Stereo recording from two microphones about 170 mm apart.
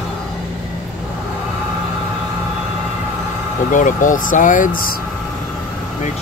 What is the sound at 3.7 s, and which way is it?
Speech, 50° left (ahead or behind).